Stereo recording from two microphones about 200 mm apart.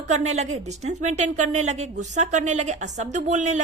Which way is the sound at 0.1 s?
35° right (ahead or behind).